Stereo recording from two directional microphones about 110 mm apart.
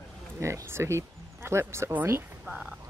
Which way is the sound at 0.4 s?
25° right (ahead or behind).